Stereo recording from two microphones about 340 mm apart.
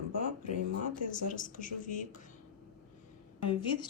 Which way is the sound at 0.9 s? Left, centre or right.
Left.